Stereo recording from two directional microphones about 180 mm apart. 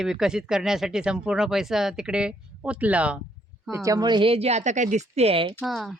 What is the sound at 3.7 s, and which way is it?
Speech, 20° right (ahead or behind).